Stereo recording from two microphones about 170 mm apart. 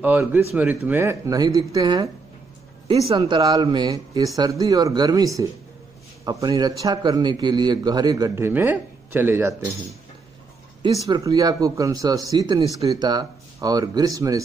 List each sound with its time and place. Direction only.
0.0 s a man's voice: 10° right (ahead or behind)
11.1 s a man's voice: 20° right (ahead or behind)